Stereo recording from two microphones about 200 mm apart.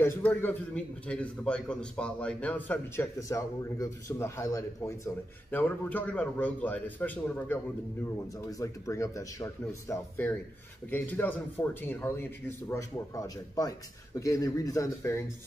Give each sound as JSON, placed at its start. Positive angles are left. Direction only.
{"t": 0.0, "sound": "a man's voice", "side_deg": 10}